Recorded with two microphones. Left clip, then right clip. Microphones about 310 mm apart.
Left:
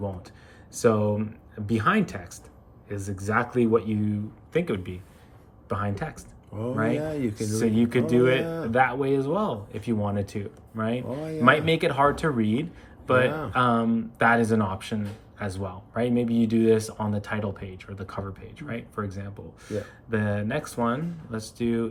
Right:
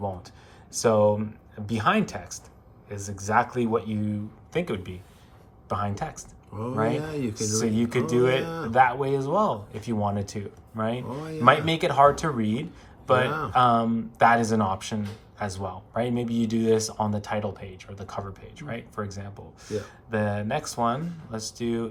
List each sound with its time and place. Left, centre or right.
0.7 s speech: centre